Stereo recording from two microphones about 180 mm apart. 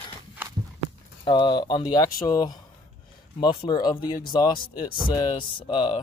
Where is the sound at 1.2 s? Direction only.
25° left (ahead or behind).